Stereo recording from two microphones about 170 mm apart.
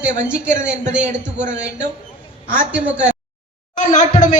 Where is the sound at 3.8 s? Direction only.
50° left (ahead or behind).